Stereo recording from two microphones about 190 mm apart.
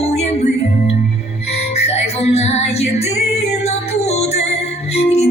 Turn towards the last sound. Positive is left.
turn(degrees=35)  # may be behind; listen again after turning